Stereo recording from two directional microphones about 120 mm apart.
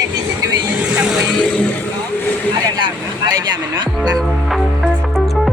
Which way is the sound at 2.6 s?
35° right (ahead or behind).